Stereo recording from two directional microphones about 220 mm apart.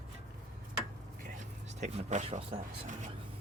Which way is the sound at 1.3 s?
30° right (ahead or behind).